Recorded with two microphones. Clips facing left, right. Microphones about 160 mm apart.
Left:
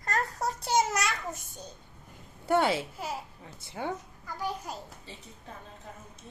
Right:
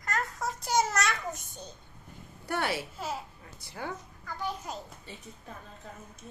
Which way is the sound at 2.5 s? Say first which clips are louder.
Left 6 dB; 20° left (ahead or behind).